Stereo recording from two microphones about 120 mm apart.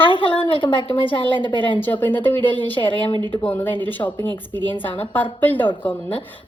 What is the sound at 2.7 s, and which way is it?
Speech, 45° left (ahead or behind).